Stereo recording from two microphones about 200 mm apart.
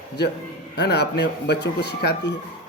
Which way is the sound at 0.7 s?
55° left (ahead or behind).